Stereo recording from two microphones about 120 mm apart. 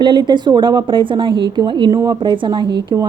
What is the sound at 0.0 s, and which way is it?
A woman's voice, 40° right (ahead or behind).